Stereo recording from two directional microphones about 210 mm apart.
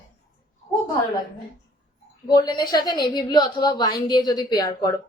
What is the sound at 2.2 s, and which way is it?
A woman's voice, 20° left (ahead or behind).